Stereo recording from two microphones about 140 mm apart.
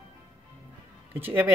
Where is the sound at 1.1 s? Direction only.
15° right (ahead or behind).